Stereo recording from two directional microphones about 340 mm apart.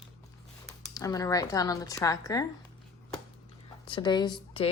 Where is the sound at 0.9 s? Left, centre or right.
Centre.